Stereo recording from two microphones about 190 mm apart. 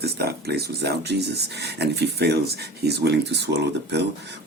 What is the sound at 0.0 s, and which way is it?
Speech, 55° right (ahead or behind).